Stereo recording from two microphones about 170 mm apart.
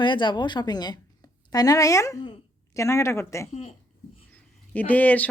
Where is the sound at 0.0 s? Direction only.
30° left (ahead or behind).